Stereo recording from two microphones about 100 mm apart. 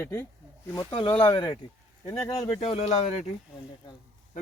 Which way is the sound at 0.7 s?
45° left (ahead or behind).